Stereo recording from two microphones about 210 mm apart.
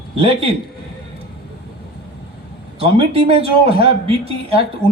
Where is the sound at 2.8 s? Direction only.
25° right (ahead or behind).